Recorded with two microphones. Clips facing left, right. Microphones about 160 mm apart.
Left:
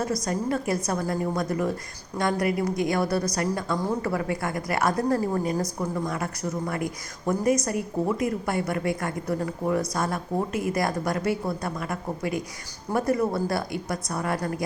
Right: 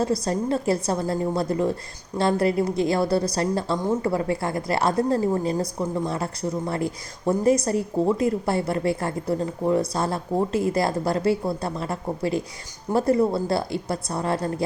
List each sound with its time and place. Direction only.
0.0 s a woman's voice: 30° right (ahead or behind)